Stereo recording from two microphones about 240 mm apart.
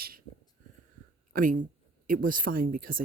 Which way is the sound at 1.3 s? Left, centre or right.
Right.